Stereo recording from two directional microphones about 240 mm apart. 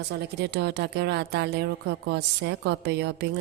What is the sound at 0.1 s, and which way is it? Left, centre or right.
A woman's voice, right.